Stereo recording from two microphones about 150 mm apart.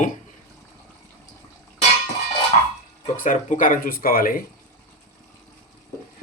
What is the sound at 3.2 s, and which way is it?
Speech, 60° left (ahead or behind).